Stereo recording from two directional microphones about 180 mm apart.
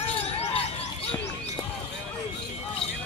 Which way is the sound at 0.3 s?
35° left (ahead or behind).